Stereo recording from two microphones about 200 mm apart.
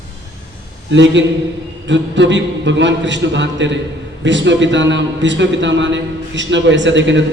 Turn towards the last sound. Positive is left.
turn(degrees=-65)  # may be behind; listen again after turning